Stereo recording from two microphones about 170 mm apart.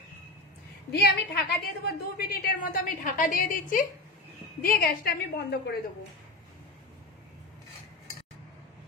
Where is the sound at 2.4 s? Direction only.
50° left (ahead or behind); by 5.5 s 70° left (ahead or behind).